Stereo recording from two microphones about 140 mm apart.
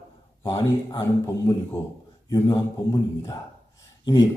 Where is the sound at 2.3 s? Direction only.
30° left (ahead or behind).